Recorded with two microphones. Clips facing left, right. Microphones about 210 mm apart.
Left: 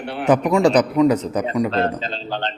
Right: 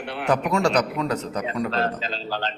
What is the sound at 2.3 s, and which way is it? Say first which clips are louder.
Speech: left 3 dB; 25° left (ahead or behind).